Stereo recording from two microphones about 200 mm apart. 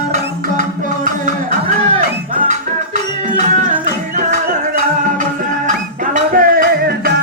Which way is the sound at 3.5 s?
40° right (ahead or behind).